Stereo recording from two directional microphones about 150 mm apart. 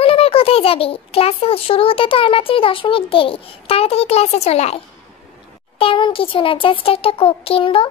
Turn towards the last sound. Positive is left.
turn(degrees=40)  # may be behind; listen again after turning